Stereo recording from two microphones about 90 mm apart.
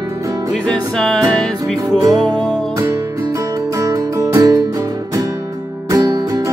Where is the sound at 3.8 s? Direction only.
40° right (ahead or behind).